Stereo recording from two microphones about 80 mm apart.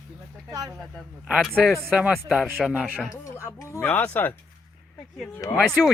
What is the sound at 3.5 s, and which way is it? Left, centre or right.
Speech, left.